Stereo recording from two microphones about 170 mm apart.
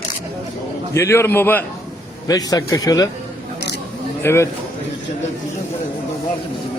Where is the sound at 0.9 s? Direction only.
15° left (ahead or behind).